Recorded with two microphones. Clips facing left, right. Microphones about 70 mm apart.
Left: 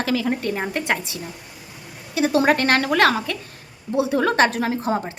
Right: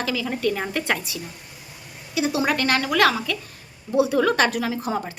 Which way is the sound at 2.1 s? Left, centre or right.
Left.